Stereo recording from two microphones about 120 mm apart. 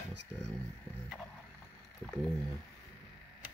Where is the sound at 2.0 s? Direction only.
10° left (ahead or behind).